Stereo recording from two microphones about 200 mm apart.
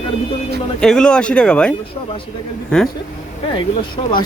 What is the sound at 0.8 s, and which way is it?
Speech, 5° left (ahead or behind).